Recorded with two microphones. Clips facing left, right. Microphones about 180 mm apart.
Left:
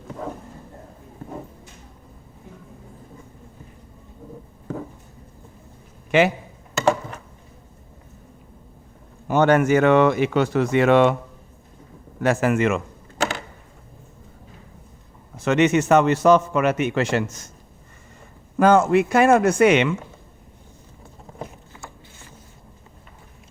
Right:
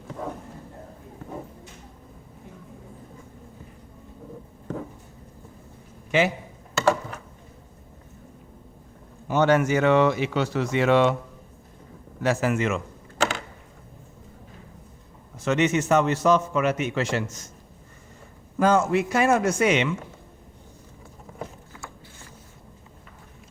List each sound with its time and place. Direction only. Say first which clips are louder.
6.1 s a man's voice: left 4 dB; 65° left (ahead or behind)
9.2 s speech: left 3 dB; 55° left (ahead or behind)
12.2 s speech: left 4 dB; 55° left (ahead or behind)
15.4 s speech: left 4 dB; 65° left (ahead or behind)
18.5 s speech: left 5 dB; 60° left (ahead or behind)
21.3 s a sound: left 1 dB; 20° left (ahead or behind)